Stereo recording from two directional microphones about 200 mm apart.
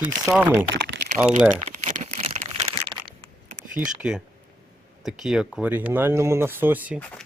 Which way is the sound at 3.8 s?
10° right (ahead or behind).